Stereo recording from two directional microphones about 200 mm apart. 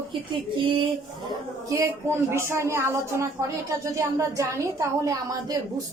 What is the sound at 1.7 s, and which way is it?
Speech, 15° right (ahead or behind).